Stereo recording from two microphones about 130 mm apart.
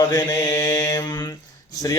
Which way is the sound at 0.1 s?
30° left (ahead or behind).